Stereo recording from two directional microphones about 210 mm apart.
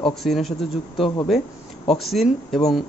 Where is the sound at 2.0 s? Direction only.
Centre (ahead or behind).